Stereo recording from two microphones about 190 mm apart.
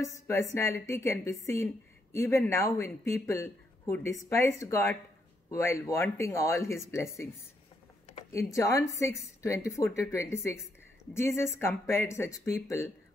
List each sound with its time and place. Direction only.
0.3 s a woman's voice: 15° left (ahead or behind)
8.3 s a woman's voice: 15° left (ahead or behind)